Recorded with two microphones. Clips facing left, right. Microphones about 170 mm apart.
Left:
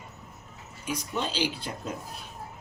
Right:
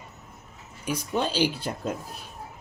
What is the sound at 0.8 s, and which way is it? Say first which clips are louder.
Speech: right 4 dB; 50° right (ahead or behind).